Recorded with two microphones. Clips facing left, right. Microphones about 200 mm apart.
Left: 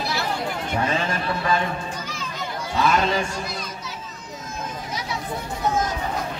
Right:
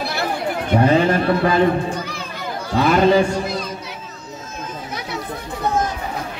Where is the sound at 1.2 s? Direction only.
60° right (ahead or behind).